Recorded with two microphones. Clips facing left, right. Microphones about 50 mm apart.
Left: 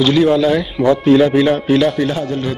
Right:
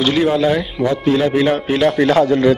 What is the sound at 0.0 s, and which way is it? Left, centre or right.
Speech, centre.